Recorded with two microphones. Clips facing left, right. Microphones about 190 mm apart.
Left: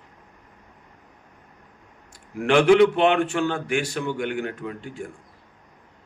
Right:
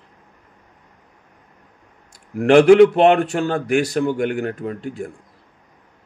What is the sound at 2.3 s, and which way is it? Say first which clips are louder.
Speech: right 6 dB; 40° right (ahead or behind).